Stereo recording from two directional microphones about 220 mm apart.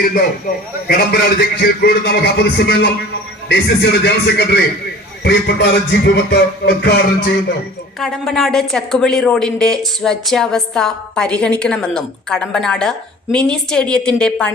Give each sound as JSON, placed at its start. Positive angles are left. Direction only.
{"t": 0.1, "sound": "a man's voice", "side_deg": 40}
{"t": 7.9, "sound": "a woman's voice", "side_deg": 0}